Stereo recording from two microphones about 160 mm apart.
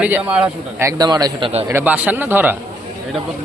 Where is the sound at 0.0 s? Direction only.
10° right (ahead or behind).